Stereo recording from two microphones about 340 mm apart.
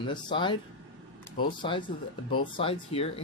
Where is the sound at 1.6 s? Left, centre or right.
Centre.